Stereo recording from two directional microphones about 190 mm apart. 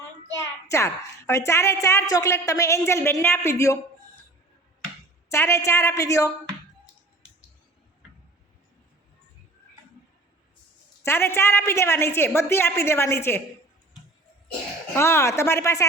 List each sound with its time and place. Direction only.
0.7 s a woman's voice: 15° left (ahead or behind)
5.3 s a woman's voice: 15° left (ahead or behind)
11.0 s a woman's voice: 15° left (ahead or behind)
14.9 s a woman's voice: 15° left (ahead or behind)